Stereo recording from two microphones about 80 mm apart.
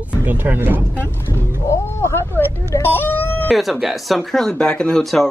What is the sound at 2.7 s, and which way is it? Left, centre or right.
Music, left.